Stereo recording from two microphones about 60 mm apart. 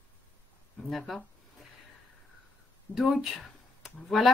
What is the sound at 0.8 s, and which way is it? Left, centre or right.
Speech, centre.